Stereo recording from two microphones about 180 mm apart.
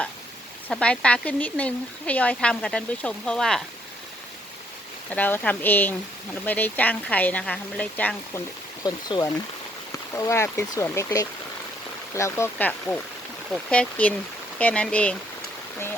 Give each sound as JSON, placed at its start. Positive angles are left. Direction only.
{"t": 0.7, "sound": "speech", "side_deg": 5}
{"t": 5.1, "sound": "speech", "side_deg": 10}
{"t": 8.8, "sound": "speech", "side_deg": 20}